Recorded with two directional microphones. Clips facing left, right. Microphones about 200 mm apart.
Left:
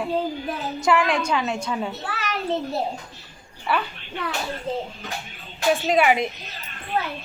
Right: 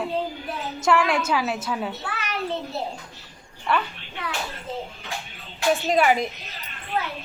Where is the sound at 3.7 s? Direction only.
5° left (ahead or behind).